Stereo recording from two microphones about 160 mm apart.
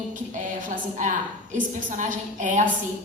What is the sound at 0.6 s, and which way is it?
A woman's voice, 50° right (ahead or behind).